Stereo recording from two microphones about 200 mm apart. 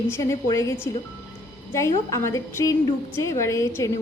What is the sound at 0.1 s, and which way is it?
A woman's voice, 15° left (ahead or behind).